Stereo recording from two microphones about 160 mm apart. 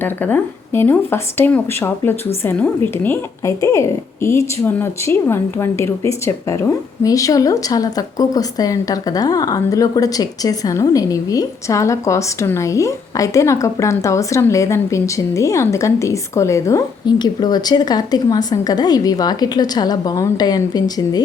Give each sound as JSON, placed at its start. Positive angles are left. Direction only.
{"t": 0.0, "sound": "speech", "side_deg": 10}